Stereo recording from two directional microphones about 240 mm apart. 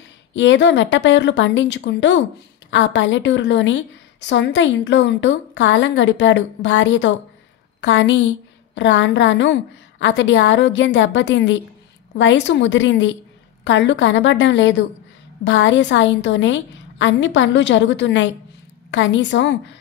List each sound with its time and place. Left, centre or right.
0.3 s a woman's voice: left